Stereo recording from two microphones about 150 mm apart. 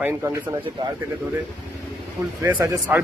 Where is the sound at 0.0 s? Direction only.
15° right (ahead or behind).